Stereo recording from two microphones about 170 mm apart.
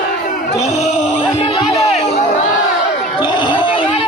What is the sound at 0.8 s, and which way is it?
Music, 35° left (ahead or behind).